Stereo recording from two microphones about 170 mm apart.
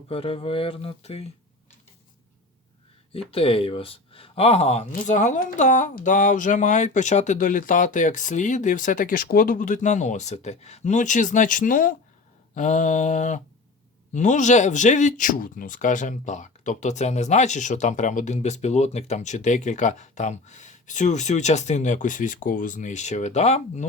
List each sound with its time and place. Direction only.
0.1 s speech: 35° left (ahead or behind)
3.3 s speech: 35° left (ahead or behind)